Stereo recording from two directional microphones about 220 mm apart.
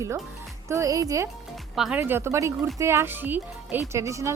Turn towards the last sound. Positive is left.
turn(degrees=-15)  # may be behind; listen again after turning